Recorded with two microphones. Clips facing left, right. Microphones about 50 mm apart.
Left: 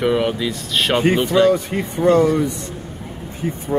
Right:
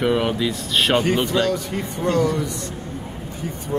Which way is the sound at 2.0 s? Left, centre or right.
Centre.